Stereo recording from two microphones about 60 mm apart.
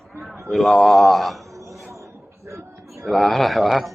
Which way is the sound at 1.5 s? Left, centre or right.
Right.